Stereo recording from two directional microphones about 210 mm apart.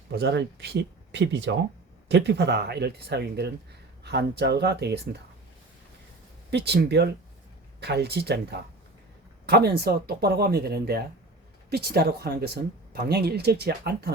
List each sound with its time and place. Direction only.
0.1 s speech: 50° right (ahead or behind)
6.5 s speech: 50° right (ahead or behind)